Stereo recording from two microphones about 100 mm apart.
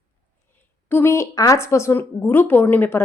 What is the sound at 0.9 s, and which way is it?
A woman's voice, 25° left (ahead or behind).